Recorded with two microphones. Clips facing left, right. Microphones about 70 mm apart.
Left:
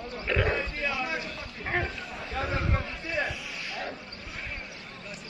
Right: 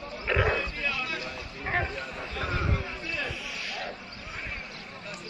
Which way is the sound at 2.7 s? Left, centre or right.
Left.